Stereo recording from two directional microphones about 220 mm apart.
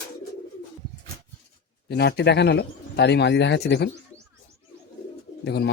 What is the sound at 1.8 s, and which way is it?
Speech, 50° left (ahead or behind).